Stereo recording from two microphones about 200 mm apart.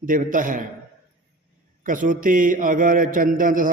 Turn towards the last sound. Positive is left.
turn(degrees=-45)  # may be behind; listen again after turning